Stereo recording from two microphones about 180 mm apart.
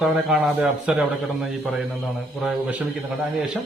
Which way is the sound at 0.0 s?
5° right (ahead or behind).